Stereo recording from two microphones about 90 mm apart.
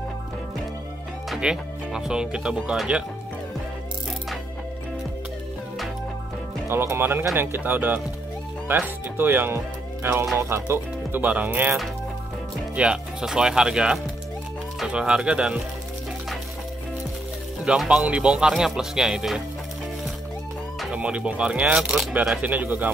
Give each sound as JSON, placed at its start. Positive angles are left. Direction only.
{"t": 1.3, "sound": "speech", "side_deg": -10}
{"t": 6.7, "sound": "speech", "side_deg": -25}
{"t": 12.7, "sound": "speech", "side_deg": -10}
{"t": 17.6, "sound": "speech", "side_deg": -5}
{"t": 20.9, "sound": "speech", "side_deg": -10}
{"t": 22.4, "sound": "speech", "side_deg": -20}